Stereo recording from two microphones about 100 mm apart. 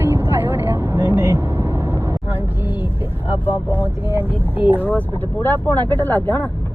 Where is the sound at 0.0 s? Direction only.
20° right (ahead or behind).